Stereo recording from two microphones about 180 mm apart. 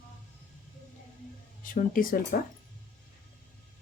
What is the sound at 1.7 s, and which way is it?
Speech, 50° left (ahead or behind).